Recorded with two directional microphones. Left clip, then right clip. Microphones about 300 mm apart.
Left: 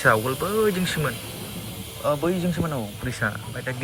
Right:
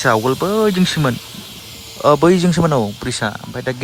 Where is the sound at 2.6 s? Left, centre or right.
Right.